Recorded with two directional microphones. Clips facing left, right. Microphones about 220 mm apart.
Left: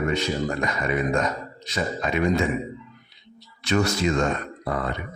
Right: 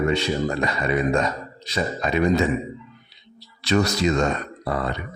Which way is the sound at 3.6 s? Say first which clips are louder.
Right 2 dB; 35° right (ahead or behind).